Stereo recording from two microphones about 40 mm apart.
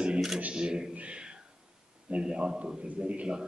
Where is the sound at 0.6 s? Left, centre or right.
Right.